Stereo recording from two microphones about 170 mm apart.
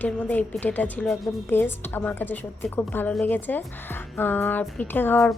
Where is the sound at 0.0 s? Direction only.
10° left (ahead or behind).